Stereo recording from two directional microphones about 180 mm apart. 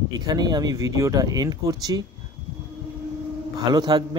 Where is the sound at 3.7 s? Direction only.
25° right (ahead or behind).